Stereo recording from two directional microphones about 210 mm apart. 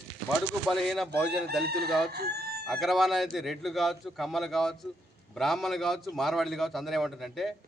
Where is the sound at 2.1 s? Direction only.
50° right (ahead or behind).